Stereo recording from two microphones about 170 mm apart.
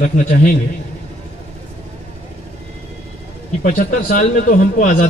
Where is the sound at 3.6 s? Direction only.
50° left (ahead or behind).